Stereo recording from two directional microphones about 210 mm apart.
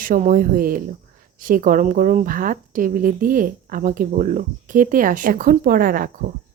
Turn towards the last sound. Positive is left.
turn(degrees=-45)  # may be behind; listen again after turning